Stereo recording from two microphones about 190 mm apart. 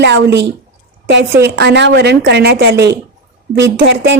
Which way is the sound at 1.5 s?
60° right (ahead or behind).